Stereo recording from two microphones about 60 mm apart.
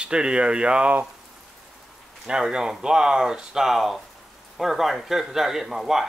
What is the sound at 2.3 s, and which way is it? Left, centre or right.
Speech, centre.